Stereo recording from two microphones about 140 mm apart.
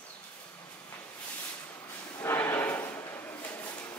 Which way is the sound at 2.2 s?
15° left (ahead or behind).